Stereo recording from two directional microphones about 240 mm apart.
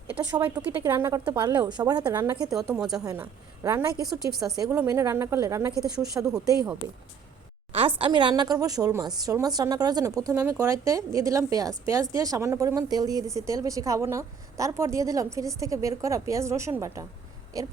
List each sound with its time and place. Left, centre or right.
0.1 s a woman's voice: centre
2.7 s a woman's voice: centre
3.0 s a woman's voice: centre